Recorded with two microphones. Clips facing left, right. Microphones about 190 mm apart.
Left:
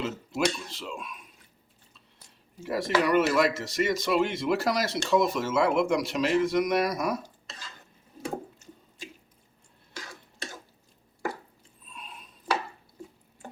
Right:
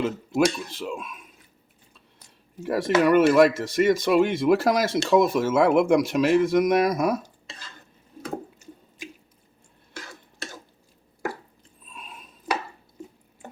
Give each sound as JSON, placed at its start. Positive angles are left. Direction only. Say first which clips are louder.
{"t": 0.0, "sound": "speech", "louder": "right 6 dB", "side_deg": -55}
{"t": 2.6, "sound": "speech", "louder": "right 5 dB", "side_deg": -50}